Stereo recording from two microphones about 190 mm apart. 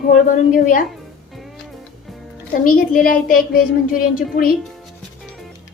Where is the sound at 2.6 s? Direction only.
50° left (ahead or behind).